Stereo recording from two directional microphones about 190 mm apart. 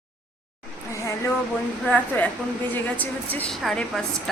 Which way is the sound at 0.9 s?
15° left (ahead or behind).